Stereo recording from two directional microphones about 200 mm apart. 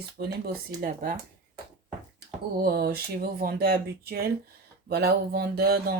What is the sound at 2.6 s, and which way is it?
Speech, 50° right (ahead or behind).